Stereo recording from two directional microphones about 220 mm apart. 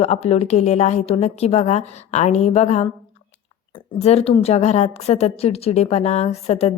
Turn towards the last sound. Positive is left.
turn(degrees=30)  # may be behind; listen again after turning